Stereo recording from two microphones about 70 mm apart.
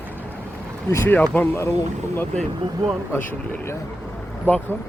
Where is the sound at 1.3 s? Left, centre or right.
Left.